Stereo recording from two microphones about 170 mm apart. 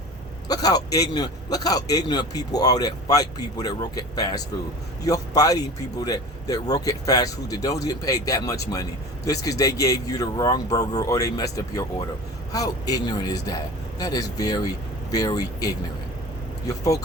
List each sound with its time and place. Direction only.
0.4 s a man's voice: 20° left (ahead or behind)